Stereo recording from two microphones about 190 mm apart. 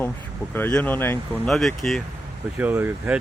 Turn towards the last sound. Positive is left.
turn(degrees=-10)  # may be behind; listen again after turning